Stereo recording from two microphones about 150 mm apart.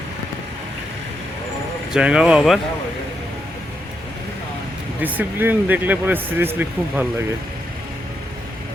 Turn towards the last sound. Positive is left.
turn(degrees=-15)  # may be behind; listen again after turning